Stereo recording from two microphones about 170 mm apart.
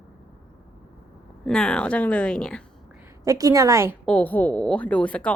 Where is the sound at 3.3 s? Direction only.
20° right (ahead or behind).